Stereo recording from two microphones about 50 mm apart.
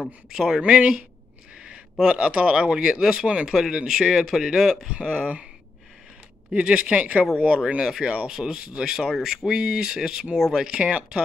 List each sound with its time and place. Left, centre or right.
0.3 s speech: centre
0.6 s speech: centre
2.0 s speech: right; by 4.8 s centre
4.8 s speech: right
6.5 s speech: right
8.3 s speech: centre